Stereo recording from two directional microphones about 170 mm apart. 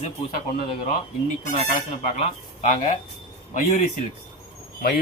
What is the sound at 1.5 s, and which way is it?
Speech, 30° left (ahead or behind).